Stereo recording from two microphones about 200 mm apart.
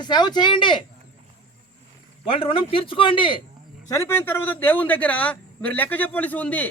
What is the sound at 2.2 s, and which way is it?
Speech, 25° left (ahead or behind).